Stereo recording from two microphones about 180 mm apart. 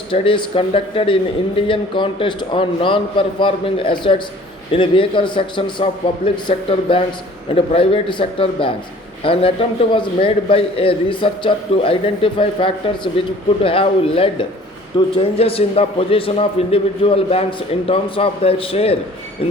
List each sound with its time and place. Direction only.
0.1 s a man's voice: 30° left (ahead or behind)